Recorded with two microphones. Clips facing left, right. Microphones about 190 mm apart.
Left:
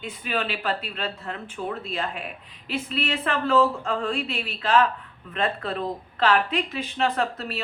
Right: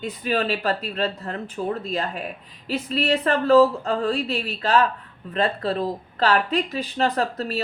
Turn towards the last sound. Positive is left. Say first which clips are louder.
# right 2 dB
turn(degrees=-35)  # may be behind; listen again after turning